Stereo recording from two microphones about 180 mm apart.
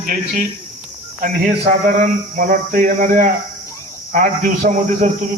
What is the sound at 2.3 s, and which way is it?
A man's voice, 50° right (ahead or behind).